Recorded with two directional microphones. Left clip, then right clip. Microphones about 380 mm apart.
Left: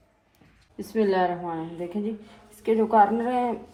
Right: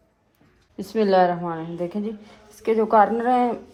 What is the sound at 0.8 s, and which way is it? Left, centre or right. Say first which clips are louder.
Speech: right 5 dB; right.